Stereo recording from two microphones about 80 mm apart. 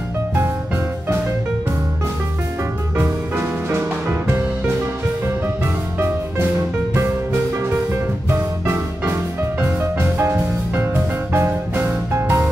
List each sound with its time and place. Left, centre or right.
3.0 s music: right
8.3 s music: right